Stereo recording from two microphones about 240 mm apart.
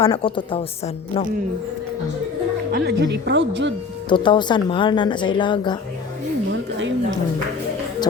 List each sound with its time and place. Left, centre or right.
0.0 s speech: left
2.7 s a woman's voice: right
4.1 s speech: centre
6.5 s a sound: right